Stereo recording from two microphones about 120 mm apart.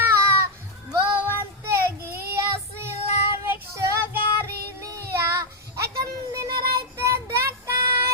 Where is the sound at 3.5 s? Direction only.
20° right (ahead or behind).